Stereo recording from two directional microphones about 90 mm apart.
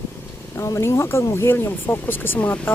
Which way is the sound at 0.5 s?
35° left (ahead or behind).